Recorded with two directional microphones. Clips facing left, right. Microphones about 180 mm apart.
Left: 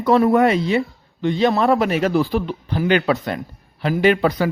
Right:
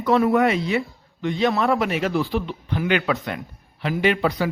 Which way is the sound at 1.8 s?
40° left (ahead or behind).